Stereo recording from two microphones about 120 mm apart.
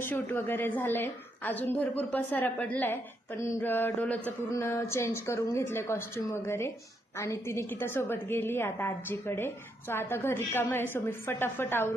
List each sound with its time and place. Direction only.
0.0 s a woman's voice: 15° left (ahead or behind)